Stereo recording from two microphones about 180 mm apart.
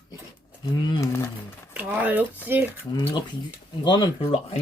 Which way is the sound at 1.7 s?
10° right (ahead or behind).